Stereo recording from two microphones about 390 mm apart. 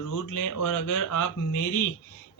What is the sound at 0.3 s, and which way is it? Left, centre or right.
Speech, left.